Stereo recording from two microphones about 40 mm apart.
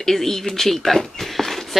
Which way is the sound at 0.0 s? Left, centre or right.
Centre.